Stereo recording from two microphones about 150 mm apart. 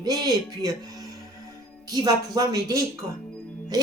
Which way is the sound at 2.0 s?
25° right (ahead or behind).